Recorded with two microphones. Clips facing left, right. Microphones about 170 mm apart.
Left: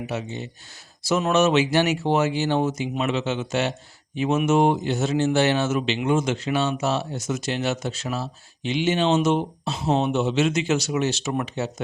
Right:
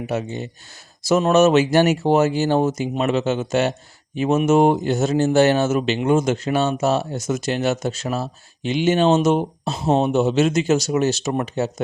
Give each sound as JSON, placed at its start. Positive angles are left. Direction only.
{"t": 0.1, "sound": "speech", "side_deg": -45}